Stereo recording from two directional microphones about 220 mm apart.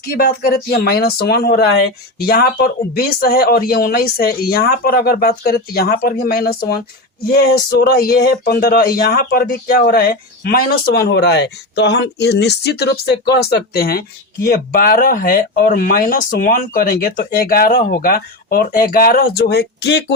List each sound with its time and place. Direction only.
0.0 s speech: 45° left (ahead or behind)